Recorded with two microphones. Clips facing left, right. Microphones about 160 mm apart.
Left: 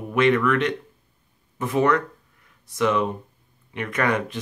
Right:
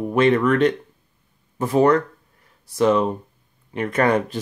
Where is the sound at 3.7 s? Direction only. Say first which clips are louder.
Right 5 dB; 35° right (ahead or behind).